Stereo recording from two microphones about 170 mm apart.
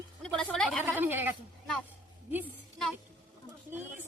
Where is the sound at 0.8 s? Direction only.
10° right (ahead or behind).